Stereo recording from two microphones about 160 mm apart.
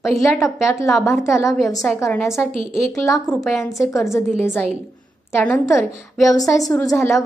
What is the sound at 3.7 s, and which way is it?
A woman's voice, 20° left (ahead or behind).